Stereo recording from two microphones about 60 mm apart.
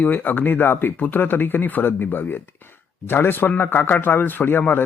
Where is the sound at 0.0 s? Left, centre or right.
Left.